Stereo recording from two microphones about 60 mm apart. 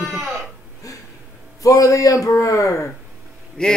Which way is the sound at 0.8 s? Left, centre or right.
Left.